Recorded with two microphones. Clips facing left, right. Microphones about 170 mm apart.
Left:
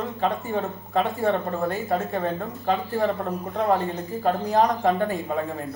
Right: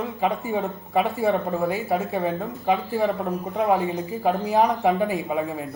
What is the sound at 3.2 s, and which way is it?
Speech, 15° right (ahead or behind).